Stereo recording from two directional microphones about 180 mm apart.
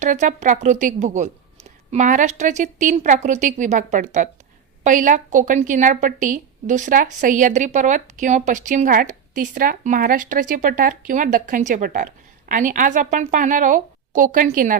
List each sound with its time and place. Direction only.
0.0 s a woman's voice: 45° right (ahead or behind)